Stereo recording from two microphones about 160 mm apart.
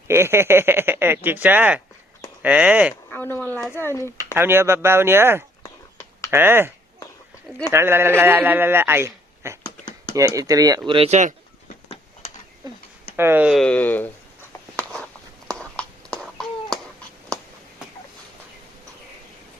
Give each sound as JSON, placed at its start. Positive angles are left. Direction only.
{"t": 0.1, "sound": "speech", "side_deg": -15}
{"t": 3.1, "sound": "speech", "side_deg": 10}
{"t": 4.4, "sound": "speech", "side_deg": -15}
{"t": 5.6, "sound": "a sound", "side_deg": 20}
{"t": 6.3, "sound": "speech", "side_deg": -15}
{"t": 7.7, "sound": "speech", "side_deg": -15}
{"t": 9.6, "sound": "computer keyboard", "side_deg": 25}
{"t": 10.2, "sound": "speech", "side_deg": -20}
{"t": 11.1, "sound": "speech", "side_deg": -50}
{"t": 11.7, "sound": "a sound", "side_deg": 45}
{"t": 13.1, "sound": "speech", "side_deg": -15}
{"t": 13.6, "sound": "speech", "side_deg": 10}
{"t": 15.4, "sound": "a sound", "side_deg": 5}